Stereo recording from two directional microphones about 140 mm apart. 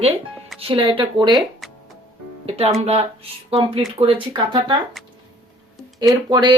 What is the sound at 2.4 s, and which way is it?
Speech, 45° right (ahead or behind).